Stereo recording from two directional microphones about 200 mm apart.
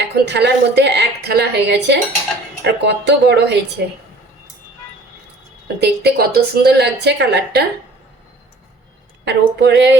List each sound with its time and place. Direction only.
0.0 s a woman's voice: 60° right (ahead or behind)
5.6 s a woman's voice: 55° right (ahead or behind)
9.2 s a woman's voice: 55° right (ahead or behind)